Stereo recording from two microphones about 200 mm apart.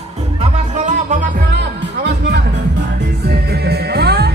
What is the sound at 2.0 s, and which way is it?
Music, 60° right (ahead or behind).